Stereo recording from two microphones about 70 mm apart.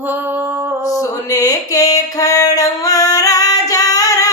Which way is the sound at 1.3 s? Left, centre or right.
Left.